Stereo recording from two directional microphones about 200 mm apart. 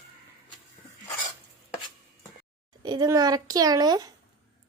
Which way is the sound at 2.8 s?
20° right (ahead or behind).